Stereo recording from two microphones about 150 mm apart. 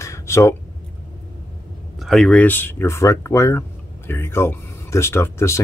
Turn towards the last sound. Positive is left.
turn(degrees=15)  # may be behind; listen again after turning